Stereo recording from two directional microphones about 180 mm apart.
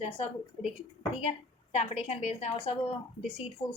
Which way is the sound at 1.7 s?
35° left (ahead or behind).